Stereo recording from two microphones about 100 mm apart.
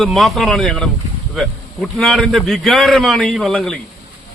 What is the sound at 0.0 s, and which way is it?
A man's voice, centre (ahead or behind).